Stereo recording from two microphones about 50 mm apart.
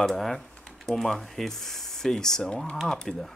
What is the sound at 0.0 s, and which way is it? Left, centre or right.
Speech, centre.